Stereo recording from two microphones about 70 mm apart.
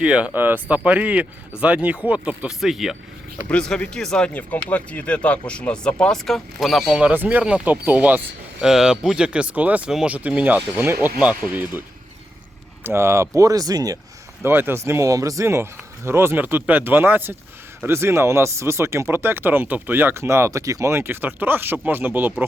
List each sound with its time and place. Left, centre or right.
0.0 s speech: centre
0.3 s speech: right
2.6 s speech: centre
3.5 s speech: centre
4.4 s speech: left; by 6.9 s centre
7.1 s speech: right
8.6 s speech: centre
10.8 s speech: right
11.2 s speech: right
12.8 s speech: right
14.4 s speech: right
20.9 s speech: right